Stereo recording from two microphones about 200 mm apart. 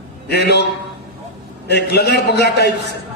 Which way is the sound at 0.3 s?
55° left (ahead or behind).